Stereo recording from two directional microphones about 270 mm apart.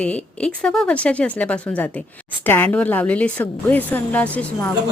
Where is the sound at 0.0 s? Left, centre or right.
Centre.